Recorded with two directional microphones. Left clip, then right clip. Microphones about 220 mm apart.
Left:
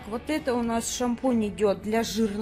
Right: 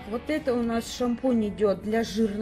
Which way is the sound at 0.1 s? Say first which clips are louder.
Right 1 dB; 5° left (ahead or behind).